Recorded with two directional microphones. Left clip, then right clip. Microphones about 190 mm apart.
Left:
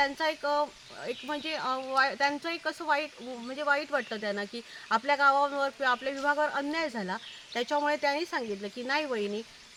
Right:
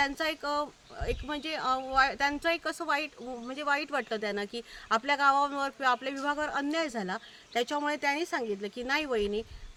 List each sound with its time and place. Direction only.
0.0 s speech: 25° right (ahead or behind)